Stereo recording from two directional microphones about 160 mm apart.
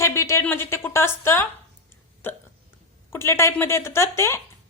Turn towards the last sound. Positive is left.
turn(degrees=15)  # may be behind; listen again after turning